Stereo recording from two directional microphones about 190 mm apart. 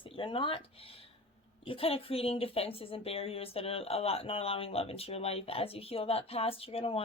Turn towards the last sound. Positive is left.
turn(degrees=30)  # may be behind; listen again after turning